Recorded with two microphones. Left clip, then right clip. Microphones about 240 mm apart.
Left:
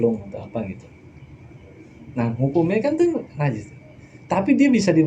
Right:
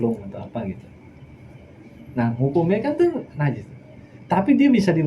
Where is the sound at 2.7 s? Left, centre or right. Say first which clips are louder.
Even; left.